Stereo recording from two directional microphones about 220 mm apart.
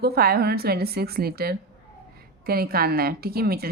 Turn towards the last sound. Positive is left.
turn(degrees=-45)  # may be behind; listen again after turning